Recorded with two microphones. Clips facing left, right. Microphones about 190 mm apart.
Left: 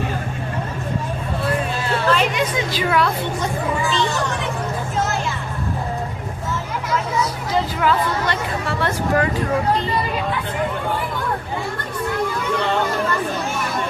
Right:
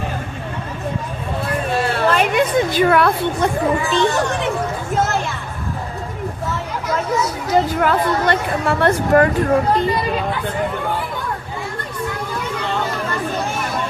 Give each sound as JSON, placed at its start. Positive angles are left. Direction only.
{"t": 1.7, "sound": "a woman's voice", "side_deg": -55}
{"t": 7.5, "sound": "a woman's voice", "side_deg": -50}